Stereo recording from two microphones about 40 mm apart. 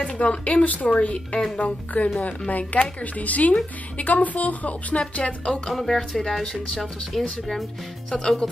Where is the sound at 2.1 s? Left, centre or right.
Left.